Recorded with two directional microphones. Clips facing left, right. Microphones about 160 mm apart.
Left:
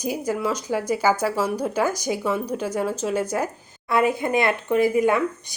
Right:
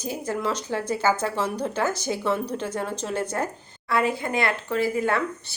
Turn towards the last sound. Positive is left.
turn(degrees=15)  # may be behind; listen again after turning